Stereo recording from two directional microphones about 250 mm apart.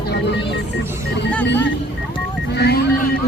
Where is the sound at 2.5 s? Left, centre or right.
Left.